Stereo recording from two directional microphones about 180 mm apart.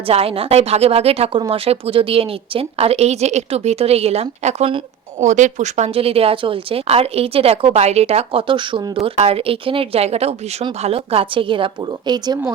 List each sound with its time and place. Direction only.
0.1 s a woman's voice: 30° right (ahead or behind)